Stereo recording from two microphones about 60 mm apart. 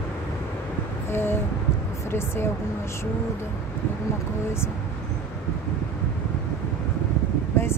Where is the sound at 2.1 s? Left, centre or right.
Left.